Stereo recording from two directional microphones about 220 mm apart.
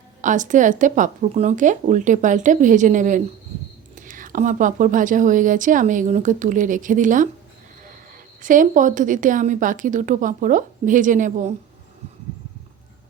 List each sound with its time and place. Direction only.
0.2 s speech: 35° right (ahead or behind)
8.4 s speech: 35° right (ahead or behind)